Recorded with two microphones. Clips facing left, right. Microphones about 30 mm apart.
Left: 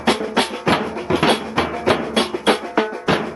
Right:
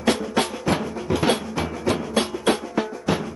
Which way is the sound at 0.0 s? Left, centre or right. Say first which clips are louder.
Left 3 dB; left.